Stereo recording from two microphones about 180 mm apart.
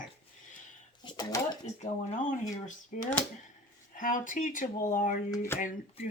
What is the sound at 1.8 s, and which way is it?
Speech, 45° left (ahead or behind).